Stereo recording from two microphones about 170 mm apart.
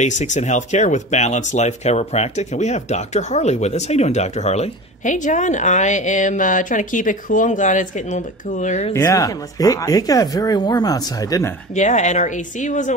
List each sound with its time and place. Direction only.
0.0 s speech: 45° left (ahead or behind)
8.9 s speech: 20° left (ahead or behind)
11.7 s speech: 45° left (ahead or behind)